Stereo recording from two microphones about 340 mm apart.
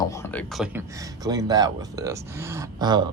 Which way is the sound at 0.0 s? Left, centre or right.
Centre.